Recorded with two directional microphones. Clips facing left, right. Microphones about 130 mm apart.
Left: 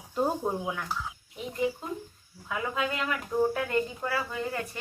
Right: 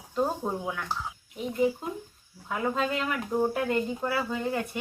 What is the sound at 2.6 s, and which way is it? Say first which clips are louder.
Speech: right 3 dB; 30° right (ahead or behind).